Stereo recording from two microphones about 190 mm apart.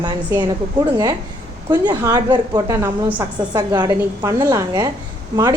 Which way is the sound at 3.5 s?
20° right (ahead or behind).